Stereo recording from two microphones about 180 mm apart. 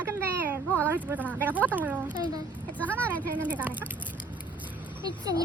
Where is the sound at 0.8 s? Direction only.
10° right (ahead or behind).